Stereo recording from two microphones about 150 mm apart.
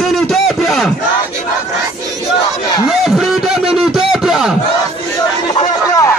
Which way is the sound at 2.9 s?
Centre (ahead or behind).